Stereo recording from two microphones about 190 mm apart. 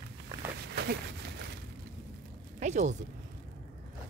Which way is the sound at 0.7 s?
60° right (ahead or behind).